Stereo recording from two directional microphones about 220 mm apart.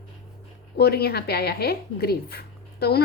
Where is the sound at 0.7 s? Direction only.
45° left (ahead or behind).